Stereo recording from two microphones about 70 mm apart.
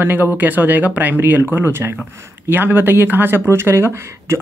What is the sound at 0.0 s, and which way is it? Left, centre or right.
Speech, right.